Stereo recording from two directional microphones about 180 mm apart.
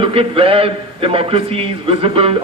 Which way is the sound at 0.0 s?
30° right (ahead or behind).